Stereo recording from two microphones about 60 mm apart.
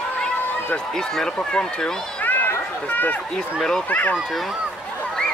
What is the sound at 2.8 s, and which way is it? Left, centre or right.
Speech, left.